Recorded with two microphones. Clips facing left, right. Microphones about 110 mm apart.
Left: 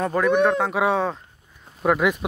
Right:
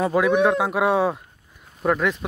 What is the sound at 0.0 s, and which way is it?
Speech, 5° right (ahead or behind).